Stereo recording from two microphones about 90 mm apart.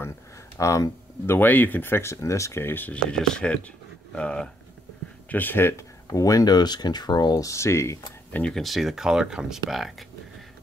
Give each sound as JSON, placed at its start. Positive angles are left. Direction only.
{"t": 0.6, "sound": "speech", "side_deg": 40}
{"t": 1.2, "sound": "speech", "side_deg": 25}
{"t": 2.6, "sound": "speech", "side_deg": 20}
{"t": 3.1, "sound": "speech", "side_deg": 10}
{"t": 6.1, "sound": "speech", "side_deg": 40}
{"t": 8.3, "sound": "speech", "side_deg": 15}
{"t": 8.5, "sound": "speech", "side_deg": 0}